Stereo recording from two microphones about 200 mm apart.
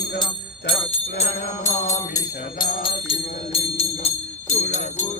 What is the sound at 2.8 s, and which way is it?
Music, 30° left (ahead or behind).